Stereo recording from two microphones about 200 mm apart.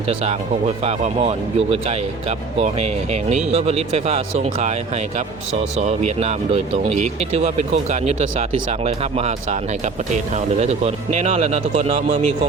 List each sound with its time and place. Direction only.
1.5 s speech: 30° right (ahead or behind)
5.8 s speech: 35° right (ahead or behind)
10.6 s speech: 35° right (ahead or behind)